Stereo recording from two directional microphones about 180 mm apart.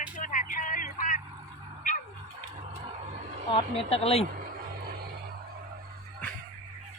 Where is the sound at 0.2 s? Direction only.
45° left (ahead or behind).